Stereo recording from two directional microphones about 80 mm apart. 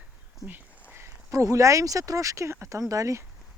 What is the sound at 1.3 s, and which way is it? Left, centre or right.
Speech, right.